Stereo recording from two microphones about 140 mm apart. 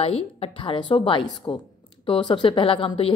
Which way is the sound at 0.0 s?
45° left (ahead or behind).